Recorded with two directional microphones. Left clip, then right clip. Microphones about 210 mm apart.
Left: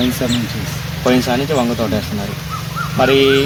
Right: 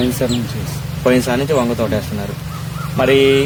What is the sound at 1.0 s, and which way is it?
Speech, 10° right (ahead or behind).